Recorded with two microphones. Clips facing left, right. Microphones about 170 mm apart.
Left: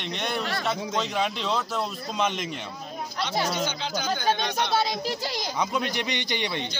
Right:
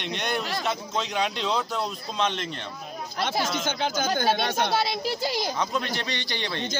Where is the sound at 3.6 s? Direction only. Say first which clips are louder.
Right 3 dB; 50° right (ahead or behind).